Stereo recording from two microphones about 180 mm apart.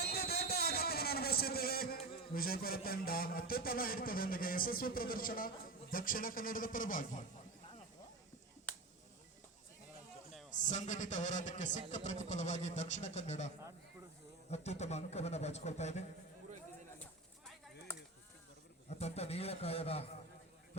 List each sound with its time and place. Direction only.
0.0 s a sound: 60° left (ahead or behind)
5.9 s a man's voice: 50° left (ahead or behind)
10.5 s a man's voice: 45° left (ahead or behind)
14.5 s a man's voice: 35° left (ahead or behind)
17.0 s a sound: 10° left (ahead or behind)
18.9 s a man's voice: 35° left (ahead or behind)